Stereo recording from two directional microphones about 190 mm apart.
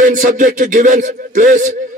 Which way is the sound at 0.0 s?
45° right (ahead or behind).